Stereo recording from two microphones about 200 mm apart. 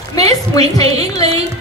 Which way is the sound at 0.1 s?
20° left (ahead or behind).